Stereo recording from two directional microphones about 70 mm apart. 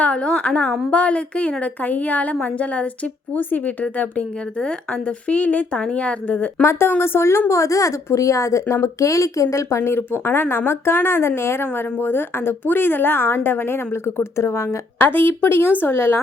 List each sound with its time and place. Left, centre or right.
0.0 s a woman's voice: centre
6.7 s a woman's voice: left
14.9 s a woman's voice: left